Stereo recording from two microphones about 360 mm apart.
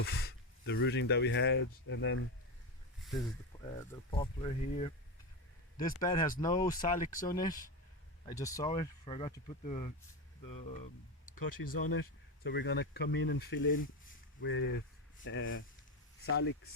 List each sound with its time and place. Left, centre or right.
0.0 s speech: left
3.5 s a sound: centre
4.1 s speech: centre
6.0 s speech: centre
6.7 s speech: left
7.3 s speech: centre
11.3 s speech: left